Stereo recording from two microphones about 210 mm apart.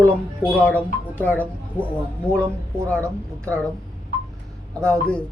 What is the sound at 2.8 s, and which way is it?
Speech, 5° left (ahead or behind).